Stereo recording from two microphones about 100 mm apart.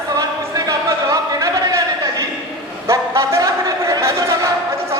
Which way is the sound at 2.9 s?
30° right (ahead or behind).